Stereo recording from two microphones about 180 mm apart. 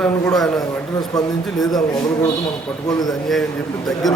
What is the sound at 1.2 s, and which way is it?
Speech, 20° left (ahead or behind).